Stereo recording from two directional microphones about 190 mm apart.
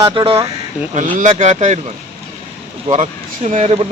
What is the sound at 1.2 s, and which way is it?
Speech, 40° right (ahead or behind).